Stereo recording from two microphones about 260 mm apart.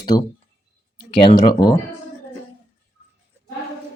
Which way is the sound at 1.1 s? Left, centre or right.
Centre.